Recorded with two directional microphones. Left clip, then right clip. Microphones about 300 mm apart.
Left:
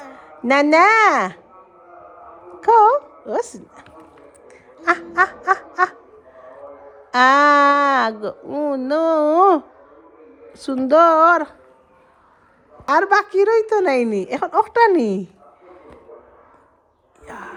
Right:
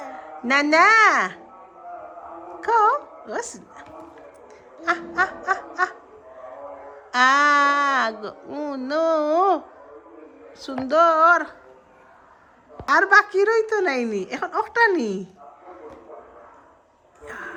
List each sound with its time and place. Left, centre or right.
0.4 s speech: centre
2.6 s speech: centre
4.8 s speech: centre
7.1 s speech: centre
12.9 s speech: centre
17.2 s a sound: centre